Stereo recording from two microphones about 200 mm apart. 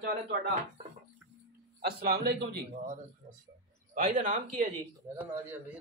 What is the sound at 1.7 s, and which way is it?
Speech, 55° right (ahead or behind).